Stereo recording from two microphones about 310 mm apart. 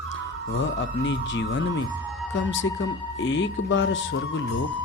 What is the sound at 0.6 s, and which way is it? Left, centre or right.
Speech, left.